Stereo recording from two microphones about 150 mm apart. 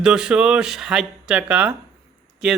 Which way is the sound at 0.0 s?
5° right (ahead or behind).